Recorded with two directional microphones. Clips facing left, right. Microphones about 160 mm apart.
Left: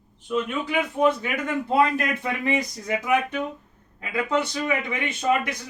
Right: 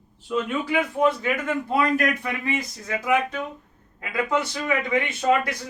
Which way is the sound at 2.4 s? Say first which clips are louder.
Left 3 dB; 20° left (ahead or behind).